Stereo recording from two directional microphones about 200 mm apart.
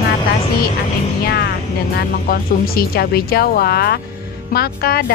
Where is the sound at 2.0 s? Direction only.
50° left (ahead or behind).